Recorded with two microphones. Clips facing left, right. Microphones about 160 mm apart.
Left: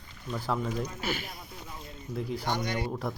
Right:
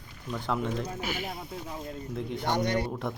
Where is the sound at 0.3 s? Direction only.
Centre (ahead or behind).